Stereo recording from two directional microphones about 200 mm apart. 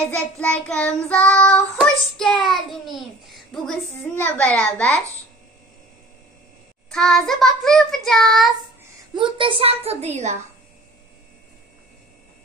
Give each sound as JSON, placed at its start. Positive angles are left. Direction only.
{"t": 0.0, "sound": "child singing", "side_deg": 5}
{"t": 6.9, "sound": "child singing", "side_deg": 0}
{"t": 9.1, "sound": "a woman's voice", "side_deg": -25}